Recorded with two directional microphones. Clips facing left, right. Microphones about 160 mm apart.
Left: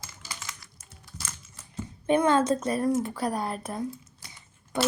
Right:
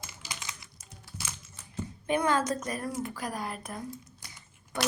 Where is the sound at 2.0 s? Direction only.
25° left (ahead or behind).